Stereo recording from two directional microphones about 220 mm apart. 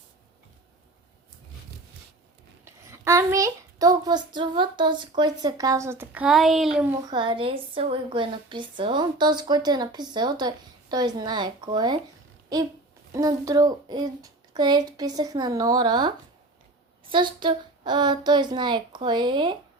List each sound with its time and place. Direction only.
2.6 s a child's voice: 10° right (ahead or behind)
7.0 s a woman's voice: 20° right (ahead or behind)
13.1 s a child's voice: 15° right (ahead or behind)